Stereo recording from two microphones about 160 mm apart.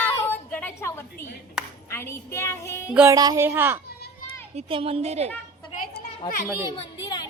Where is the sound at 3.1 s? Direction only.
20° right (ahead or behind).